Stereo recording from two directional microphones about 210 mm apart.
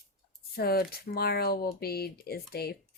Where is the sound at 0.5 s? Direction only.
45° left (ahead or behind).